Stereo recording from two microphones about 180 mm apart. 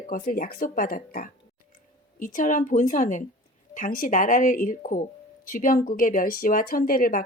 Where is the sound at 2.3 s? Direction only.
45° left (ahead or behind).